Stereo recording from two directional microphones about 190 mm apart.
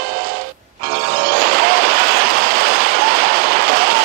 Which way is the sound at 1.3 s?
50° right (ahead or behind).